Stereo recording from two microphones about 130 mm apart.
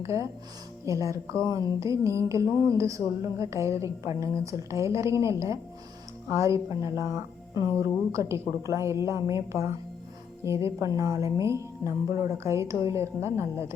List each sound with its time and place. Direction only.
0.0 s speech: 20° right (ahead or behind)